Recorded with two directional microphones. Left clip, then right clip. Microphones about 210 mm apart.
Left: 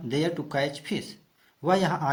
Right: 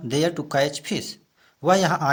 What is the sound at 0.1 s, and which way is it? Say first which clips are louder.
A man's voice: right 5 dB; 35° right (ahead or behind).